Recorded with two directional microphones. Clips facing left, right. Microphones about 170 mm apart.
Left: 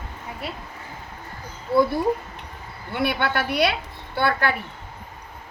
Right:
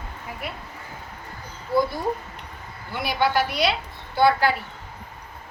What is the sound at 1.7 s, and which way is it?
Speech, 25° left (ahead or behind).